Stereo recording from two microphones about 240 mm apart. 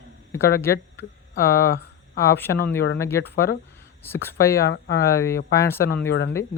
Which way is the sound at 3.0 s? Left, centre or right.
Centre.